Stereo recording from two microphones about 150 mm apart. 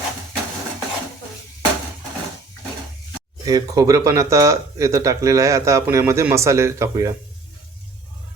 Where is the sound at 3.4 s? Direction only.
25° right (ahead or behind).